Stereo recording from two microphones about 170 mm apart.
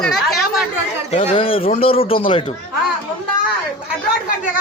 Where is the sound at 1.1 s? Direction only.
40° left (ahead or behind).